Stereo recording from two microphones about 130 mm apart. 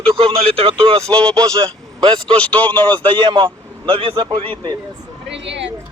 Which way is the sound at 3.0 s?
40° right (ahead or behind).